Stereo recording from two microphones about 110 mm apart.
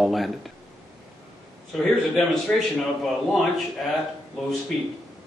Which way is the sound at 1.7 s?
Centre (ahead or behind).